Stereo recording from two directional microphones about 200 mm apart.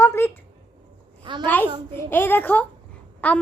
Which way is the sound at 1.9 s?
10° left (ahead or behind).